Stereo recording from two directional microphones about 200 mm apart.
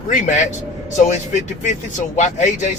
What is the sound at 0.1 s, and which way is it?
Speech, 35° left (ahead or behind).